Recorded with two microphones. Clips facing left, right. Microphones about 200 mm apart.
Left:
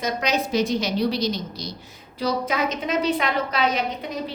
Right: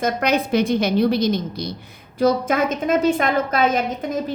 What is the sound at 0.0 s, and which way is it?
A woman's voice, 55° right (ahead or behind).